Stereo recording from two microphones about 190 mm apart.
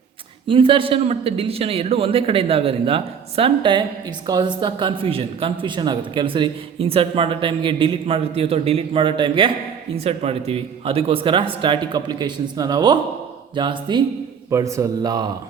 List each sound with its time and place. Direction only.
0.4 s a man's voice: 25° right (ahead or behind)